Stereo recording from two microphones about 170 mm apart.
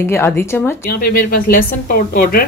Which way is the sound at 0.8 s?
60° left (ahead or behind).